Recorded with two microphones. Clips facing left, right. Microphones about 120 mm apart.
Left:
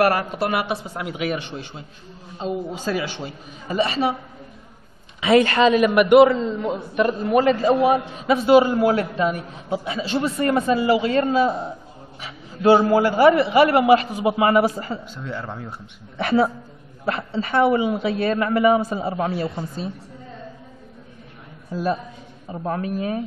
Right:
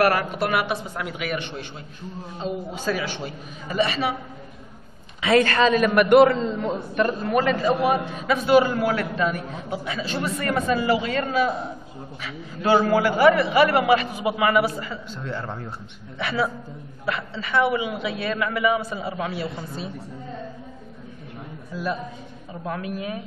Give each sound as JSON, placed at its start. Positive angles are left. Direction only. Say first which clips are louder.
{"t": 0.0, "sound": "a man's voice", "louder": "left 1 dB", "side_deg": 30}
{"t": 5.2, "sound": "a man's voice", "louder": "left 3 dB", "side_deg": 20}
{"t": 15.0, "sound": "speech", "louder": "even", "side_deg": 10}
{"t": 16.2, "sound": "a man's voice", "louder": "left 6 dB", "side_deg": 40}
{"t": 22.5, "sound": "a man's voice", "louder": "left 5 dB", "side_deg": 35}